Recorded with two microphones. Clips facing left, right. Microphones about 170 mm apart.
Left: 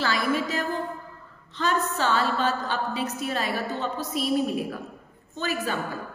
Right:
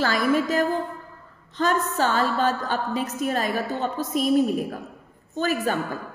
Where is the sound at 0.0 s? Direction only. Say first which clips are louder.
Right 4 dB; 45° right (ahead or behind).